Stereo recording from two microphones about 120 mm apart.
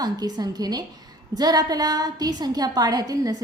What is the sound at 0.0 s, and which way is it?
A woman's voice, 35° right (ahead or behind).